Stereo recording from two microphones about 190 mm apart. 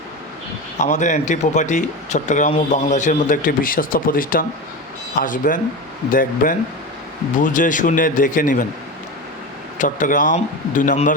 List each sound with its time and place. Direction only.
0.8 s speech: 40° left (ahead or behind)
9.7 s speech: 40° left (ahead or behind)